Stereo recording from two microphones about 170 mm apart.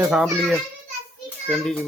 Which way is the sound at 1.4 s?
5° left (ahead or behind).